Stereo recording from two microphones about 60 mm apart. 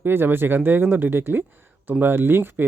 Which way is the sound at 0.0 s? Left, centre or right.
Right.